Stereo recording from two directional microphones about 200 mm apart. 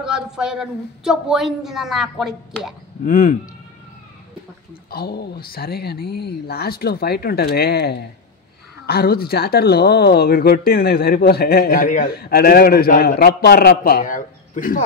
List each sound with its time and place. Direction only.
0.0 s a woman's voice: 5° right (ahead or behind)
3.1 s speech: 40° left (ahead or behind)
4.9 s speech: 50° left (ahead or behind)